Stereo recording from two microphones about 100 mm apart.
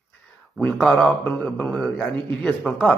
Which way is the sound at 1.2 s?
20° left (ahead or behind).